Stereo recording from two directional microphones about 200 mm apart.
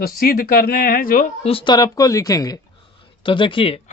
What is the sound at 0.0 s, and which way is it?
Speech, 45° left (ahead or behind).